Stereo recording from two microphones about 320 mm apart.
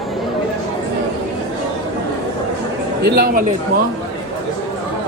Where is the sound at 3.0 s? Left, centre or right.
Right.